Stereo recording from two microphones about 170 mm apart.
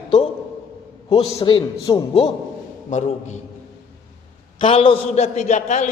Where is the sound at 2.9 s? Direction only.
45° left (ahead or behind).